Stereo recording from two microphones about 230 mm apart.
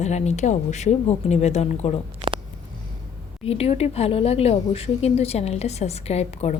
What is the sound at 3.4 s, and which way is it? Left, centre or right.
A woman's voice, left.